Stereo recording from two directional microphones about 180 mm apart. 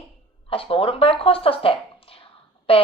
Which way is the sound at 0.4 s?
30° left (ahead or behind).